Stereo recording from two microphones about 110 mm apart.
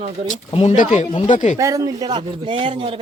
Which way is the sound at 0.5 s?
90° left.